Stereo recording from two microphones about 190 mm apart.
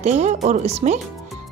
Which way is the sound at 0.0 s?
35° right (ahead or behind).